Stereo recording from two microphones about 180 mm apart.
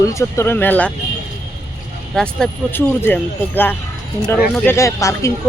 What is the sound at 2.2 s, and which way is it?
Speech, 5° left (ahead or behind).